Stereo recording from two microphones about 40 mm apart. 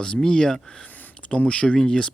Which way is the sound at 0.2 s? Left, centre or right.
Centre.